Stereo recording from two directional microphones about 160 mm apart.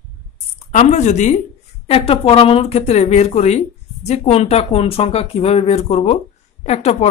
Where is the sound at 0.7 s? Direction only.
45° left (ahead or behind).